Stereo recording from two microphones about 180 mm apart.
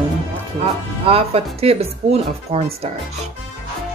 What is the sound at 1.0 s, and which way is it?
Speech, 35° right (ahead or behind).